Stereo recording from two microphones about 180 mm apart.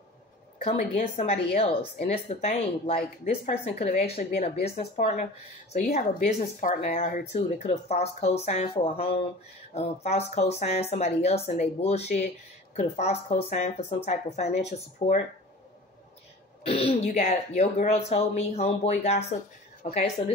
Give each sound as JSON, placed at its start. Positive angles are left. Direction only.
{"t": 0.7, "sound": "speech", "side_deg": 40}
{"t": 16.6, "sound": "speech", "side_deg": 35}